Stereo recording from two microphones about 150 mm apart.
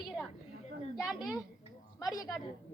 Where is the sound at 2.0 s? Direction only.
25° left (ahead or behind).